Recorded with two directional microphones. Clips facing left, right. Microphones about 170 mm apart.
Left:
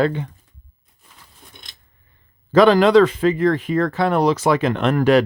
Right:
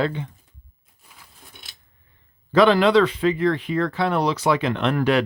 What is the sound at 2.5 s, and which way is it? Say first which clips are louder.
Speech: left 4 dB; 40° left (ahead or behind).